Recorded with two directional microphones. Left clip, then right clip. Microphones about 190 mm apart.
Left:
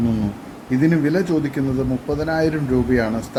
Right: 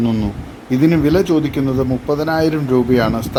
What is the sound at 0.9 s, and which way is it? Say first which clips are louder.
A man's voice: right 5 dB; 5° right (ahead or behind).